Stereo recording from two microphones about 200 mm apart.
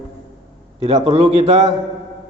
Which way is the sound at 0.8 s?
30° right (ahead or behind).